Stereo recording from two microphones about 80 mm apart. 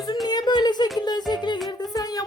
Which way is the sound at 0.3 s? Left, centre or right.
Left.